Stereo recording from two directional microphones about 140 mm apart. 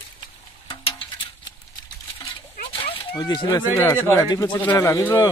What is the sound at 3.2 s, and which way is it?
Speech, 30° left (ahead or behind).